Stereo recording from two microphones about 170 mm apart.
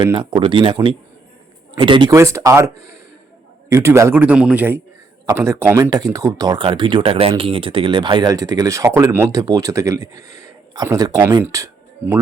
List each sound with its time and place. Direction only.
0.0 s speech: 25° right (ahead or behind)
2.1 s a man's voice: 15° right (ahead or behind)